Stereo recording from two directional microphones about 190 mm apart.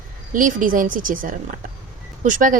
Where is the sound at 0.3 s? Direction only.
45° right (ahead or behind).